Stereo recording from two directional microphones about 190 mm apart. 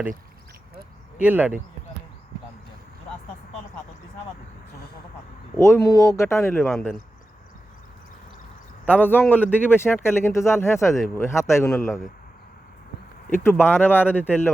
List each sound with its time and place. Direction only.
1.2 s speech: 10° right (ahead or behind)
5.5 s speech: 15° left (ahead or behind)
8.9 s speech: 10° left (ahead or behind)
13.3 s speech: 10° left (ahead or behind)